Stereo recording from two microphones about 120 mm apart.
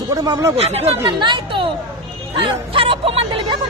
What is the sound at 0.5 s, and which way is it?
Speech, 60° right (ahead or behind).